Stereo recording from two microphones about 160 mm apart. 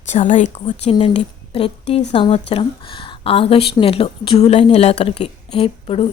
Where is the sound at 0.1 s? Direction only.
50° left (ahead or behind).